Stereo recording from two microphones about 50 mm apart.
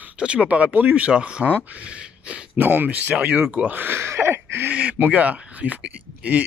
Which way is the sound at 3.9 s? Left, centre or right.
Right.